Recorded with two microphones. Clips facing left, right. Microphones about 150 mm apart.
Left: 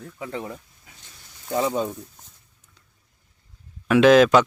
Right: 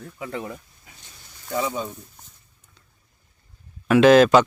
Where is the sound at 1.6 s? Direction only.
40° left (ahead or behind).